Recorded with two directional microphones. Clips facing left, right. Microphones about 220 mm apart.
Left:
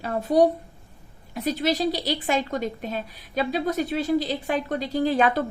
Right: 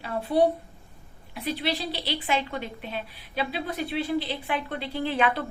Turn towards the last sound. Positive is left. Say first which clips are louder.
# left 5 dB
turn(degrees=40)  # may be behind; listen again after turning